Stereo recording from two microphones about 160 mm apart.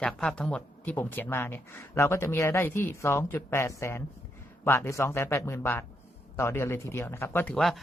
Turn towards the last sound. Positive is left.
turn(degrees=0)  # may be behind; listen again after turning